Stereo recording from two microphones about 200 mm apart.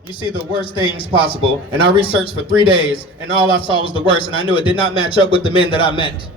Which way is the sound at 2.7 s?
25° left (ahead or behind).